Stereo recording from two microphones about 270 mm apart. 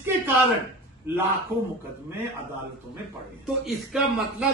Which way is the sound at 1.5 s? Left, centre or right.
Centre.